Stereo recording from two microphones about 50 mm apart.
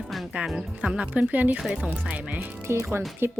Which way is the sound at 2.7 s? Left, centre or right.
Right.